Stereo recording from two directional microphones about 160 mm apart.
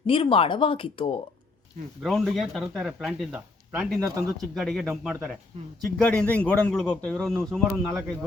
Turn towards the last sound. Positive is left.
turn(degrees=5)  # may be behind; listen again after turning